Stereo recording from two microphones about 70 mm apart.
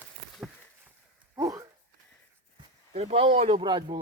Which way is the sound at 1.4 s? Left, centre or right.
Right.